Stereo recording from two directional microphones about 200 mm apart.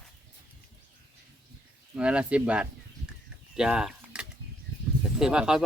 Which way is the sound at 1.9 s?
5° right (ahead or behind).